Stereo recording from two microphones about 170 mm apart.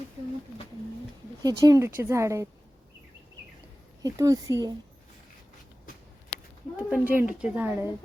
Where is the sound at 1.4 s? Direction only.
20° right (ahead or behind).